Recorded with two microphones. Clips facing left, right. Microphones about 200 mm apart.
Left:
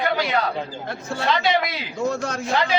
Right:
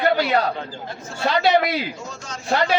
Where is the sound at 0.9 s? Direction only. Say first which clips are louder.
Left 5 dB; 65° left (ahead or behind).